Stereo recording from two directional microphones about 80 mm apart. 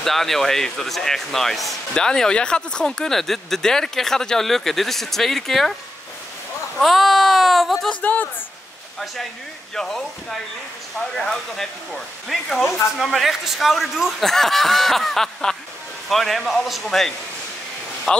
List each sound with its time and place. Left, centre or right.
0.0 s speech: centre
6.8 s speech: centre
7.9 s speech: left
9.8 s speech: centre